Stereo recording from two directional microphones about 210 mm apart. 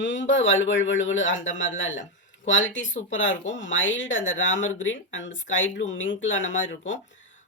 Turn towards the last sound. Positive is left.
turn(degrees=60)  # may be behind; listen again after turning